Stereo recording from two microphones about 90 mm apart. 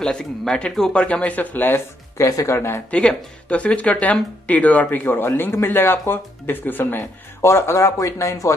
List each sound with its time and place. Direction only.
0.0 s speech: 10° left (ahead or behind)
2.1 s speech: 35° left (ahead or behind)
2.9 s speech: 10° left (ahead or behind); by 8.5 s 35° left (ahead or behind)